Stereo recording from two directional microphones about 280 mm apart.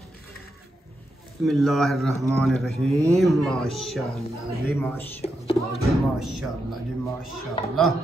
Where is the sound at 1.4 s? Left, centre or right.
Centre.